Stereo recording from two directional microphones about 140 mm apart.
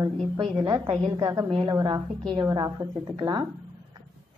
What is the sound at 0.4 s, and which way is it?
A woman's voice, 40° right (ahead or behind).